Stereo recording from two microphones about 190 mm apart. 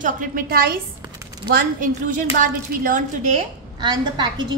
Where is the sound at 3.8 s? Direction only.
20° right (ahead or behind).